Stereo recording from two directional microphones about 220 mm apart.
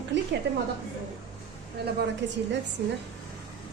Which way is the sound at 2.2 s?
55° right (ahead or behind).